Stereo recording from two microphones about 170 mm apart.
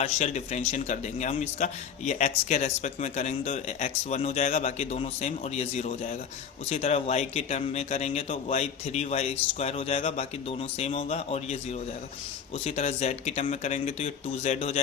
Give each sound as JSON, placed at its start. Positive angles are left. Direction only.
{"t": 0.0, "sound": "speech", "side_deg": 40}